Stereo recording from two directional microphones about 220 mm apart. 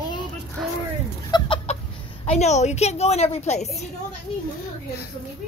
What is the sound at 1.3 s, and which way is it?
Chicken, 25° left (ahead or behind).